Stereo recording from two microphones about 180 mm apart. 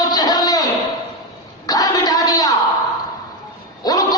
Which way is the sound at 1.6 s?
20° left (ahead or behind).